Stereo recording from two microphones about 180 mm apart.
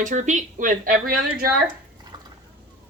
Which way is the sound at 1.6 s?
25° right (ahead or behind).